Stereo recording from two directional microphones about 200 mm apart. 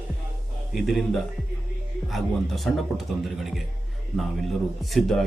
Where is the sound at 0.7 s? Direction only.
Centre (ahead or behind).